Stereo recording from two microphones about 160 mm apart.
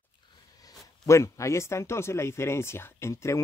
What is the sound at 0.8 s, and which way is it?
Speech, 20° left (ahead or behind).